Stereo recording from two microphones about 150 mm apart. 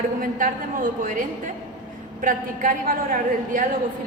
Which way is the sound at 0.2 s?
65° right (ahead or behind).